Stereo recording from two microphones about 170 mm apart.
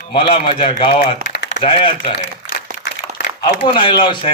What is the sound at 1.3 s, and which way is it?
Typing, 90° left.